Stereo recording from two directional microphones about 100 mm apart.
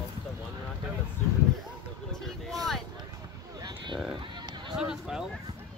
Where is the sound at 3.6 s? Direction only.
50° right (ahead or behind).